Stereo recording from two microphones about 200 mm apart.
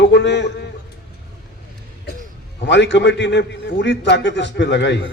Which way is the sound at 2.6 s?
60° left (ahead or behind).